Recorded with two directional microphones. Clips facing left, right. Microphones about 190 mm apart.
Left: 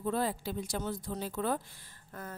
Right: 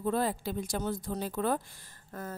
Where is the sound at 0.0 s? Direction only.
50° right (ahead or behind).